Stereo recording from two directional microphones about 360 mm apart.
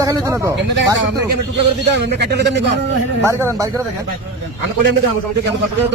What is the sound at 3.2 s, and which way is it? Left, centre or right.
Speech, centre.